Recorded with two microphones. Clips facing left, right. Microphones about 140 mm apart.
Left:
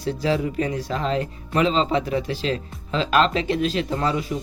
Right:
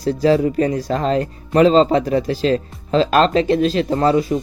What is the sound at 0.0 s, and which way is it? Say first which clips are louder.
Speech: right 8 dB; 40° right (ahead or behind).